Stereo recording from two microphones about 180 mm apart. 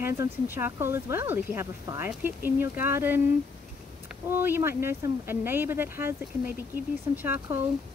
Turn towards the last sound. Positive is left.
turn(degrees=-10)  # may be behind; listen again after turning